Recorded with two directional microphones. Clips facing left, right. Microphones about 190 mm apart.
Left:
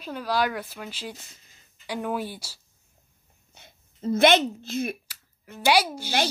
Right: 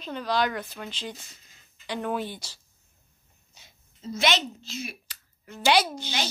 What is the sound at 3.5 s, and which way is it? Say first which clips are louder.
Speech: left 6 dB; 55° left (ahead or behind).